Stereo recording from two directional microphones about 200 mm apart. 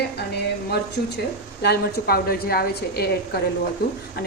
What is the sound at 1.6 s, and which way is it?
A woman's voice, 50° left (ahead or behind).